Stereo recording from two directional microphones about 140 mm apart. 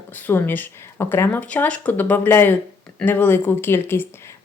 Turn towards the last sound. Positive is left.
turn(degrees=15)  # may be behind; listen again after turning